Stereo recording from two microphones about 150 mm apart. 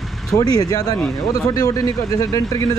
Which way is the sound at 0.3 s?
25° left (ahead or behind).